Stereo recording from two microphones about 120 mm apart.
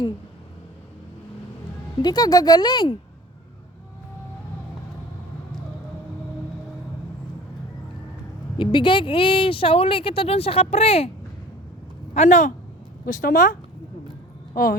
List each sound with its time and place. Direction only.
2.0 s speech: 35° left (ahead or behind)
8.5 s speech: 45° left (ahead or behind)
12.1 s speech: 75° left (ahead or behind); by 13.6 s 90° left